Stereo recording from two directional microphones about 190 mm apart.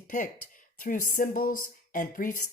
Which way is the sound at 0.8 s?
45° left (ahead or behind).